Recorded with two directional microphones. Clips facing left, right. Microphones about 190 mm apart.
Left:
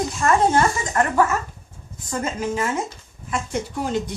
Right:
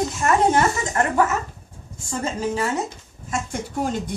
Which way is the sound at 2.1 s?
35° right (ahead or behind).